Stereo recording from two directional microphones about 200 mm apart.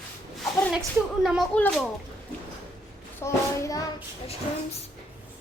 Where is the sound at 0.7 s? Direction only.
Centre (ahead or behind).